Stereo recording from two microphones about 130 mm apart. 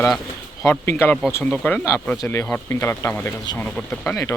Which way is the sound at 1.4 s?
10° left (ahead or behind).